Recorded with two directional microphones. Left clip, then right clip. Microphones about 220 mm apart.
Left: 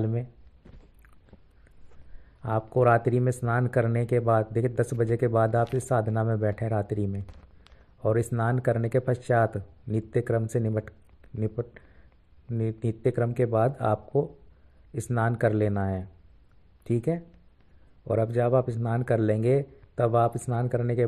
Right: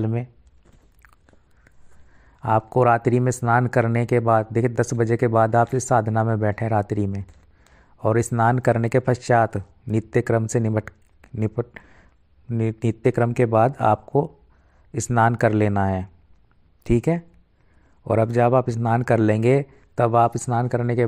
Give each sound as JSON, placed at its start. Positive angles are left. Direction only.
{"t": 0.0, "sound": "speech", "side_deg": -45}
{"t": 2.4, "sound": "speech", "side_deg": -45}